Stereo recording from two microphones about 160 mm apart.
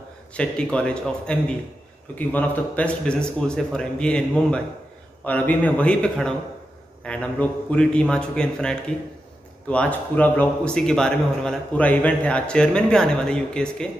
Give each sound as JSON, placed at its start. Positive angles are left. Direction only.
{"t": 0.3, "sound": "a man's voice", "side_deg": 5}